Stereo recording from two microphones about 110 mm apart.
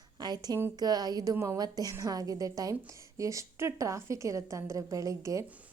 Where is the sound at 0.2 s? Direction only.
40° right (ahead or behind).